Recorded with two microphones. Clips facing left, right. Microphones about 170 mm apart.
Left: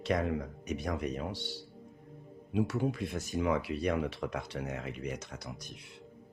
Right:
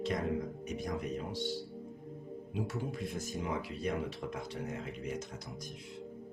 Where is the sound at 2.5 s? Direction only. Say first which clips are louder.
Left 7 dB; 70° left (ahead or behind).